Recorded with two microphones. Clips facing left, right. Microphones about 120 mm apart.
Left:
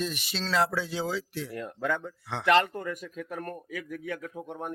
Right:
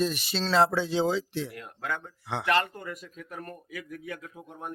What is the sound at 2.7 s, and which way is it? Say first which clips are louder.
Speech: left 5 dB; 75° left (ahead or behind).